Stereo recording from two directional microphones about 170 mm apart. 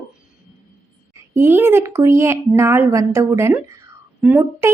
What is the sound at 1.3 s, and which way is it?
A woman's voice, 15° right (ahead or behind).